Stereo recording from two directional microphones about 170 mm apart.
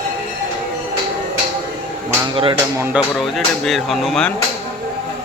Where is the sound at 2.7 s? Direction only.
10° right (ahead or behind).